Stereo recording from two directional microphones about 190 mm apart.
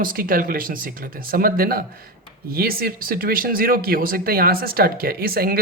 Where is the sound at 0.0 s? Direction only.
50° right (ahead or behind).